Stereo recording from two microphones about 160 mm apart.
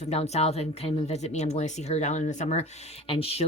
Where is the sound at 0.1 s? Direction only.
40° left (ahead or behind).